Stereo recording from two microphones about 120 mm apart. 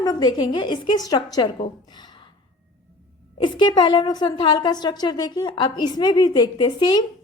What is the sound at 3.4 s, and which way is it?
A woman's voice, 40° left (ahead or behind).